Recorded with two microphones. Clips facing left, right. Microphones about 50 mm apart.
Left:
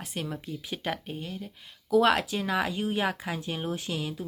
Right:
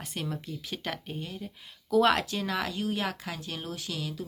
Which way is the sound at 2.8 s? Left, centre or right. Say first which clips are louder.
Left 3 dB; left.